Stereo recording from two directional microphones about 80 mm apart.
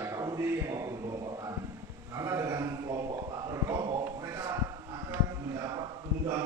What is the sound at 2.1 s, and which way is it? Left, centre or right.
Speech, right.